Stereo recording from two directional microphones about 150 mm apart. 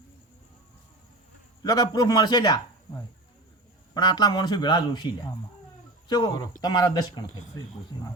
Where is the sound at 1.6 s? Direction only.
30° left (ahead or behind).